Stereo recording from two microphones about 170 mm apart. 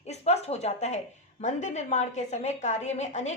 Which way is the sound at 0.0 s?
40° left (ahead or behind).